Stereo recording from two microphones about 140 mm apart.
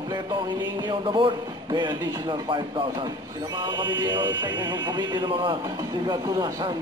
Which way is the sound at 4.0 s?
35° right (ahead or behind).